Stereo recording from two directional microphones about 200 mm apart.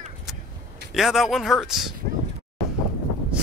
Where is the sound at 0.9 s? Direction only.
Centre (ahead or behind).